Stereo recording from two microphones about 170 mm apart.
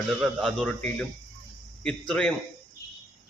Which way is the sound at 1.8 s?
5° left (ahead or behind).